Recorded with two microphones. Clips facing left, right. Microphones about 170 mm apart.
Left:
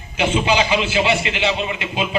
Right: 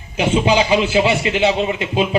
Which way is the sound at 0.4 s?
40° right (ahead or behind).